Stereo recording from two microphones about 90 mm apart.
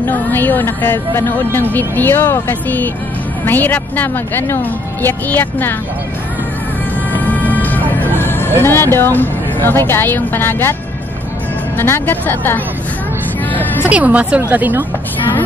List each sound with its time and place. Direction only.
0.0 s speech: 20° left (ahead or behind)
7.2 s music: 20° left (ahead or behind)
8.6 s speech: 30° left (ahead or behind)
11.8 s speech: 25° left (ahead or behind)
13.5 s music: 20° left (ahead or behind)
13.8 s a woman's voice: 15° right (ahead or behind)